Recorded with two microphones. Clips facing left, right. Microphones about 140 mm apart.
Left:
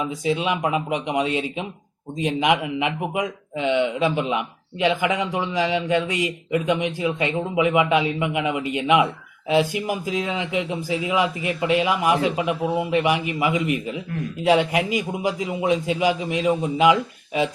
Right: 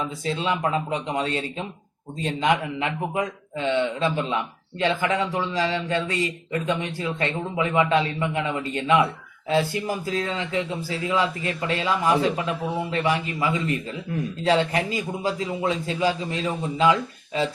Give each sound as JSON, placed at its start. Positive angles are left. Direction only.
{"t": 0.0, "sound": "a man's voice", "side_deg": 10}